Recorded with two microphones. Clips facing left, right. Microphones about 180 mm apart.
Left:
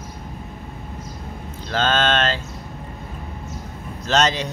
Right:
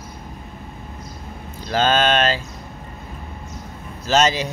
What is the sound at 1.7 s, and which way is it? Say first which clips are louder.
Speech: right 2 dB; 10° right (ahead or behind).